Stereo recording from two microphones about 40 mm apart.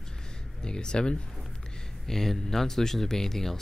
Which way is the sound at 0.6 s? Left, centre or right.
Left.